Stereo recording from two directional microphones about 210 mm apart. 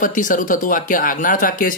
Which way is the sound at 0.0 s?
40° left (ahead or behind).